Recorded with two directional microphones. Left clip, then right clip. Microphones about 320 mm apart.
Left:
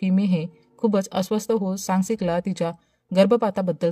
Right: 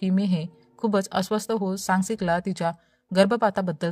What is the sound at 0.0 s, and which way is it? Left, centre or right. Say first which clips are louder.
Speech: left 3 dB; right.